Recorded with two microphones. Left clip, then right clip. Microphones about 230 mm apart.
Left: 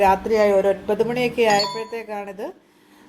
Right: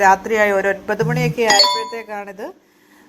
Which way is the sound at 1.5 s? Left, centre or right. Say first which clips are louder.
Right 7 dB; right.